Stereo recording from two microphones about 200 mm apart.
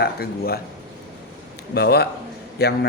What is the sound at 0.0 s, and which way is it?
Speech, 50° left (ahead or behind).